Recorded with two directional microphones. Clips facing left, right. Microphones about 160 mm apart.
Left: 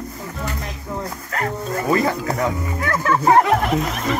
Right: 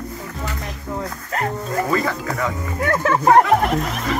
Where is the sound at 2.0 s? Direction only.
30° left (ahead or behind).